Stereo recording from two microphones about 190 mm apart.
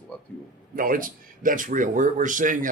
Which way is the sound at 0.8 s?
45° right (ahead or behind).